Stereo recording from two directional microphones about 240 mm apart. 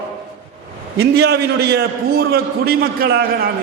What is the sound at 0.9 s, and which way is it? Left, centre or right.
A man's voice, right.